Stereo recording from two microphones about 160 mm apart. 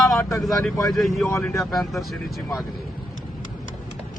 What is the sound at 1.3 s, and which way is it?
Speech, 20° left (ahead or behind).